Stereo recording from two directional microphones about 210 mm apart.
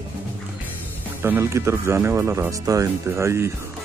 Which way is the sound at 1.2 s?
10° right (ahead or behind).